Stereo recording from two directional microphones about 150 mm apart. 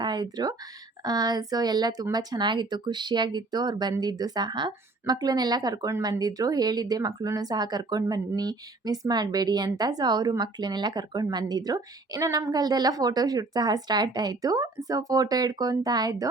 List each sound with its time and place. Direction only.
0.0 s speech: 30° right (ahead or behind)